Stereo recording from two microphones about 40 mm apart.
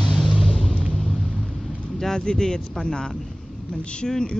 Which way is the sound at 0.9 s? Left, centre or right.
Left.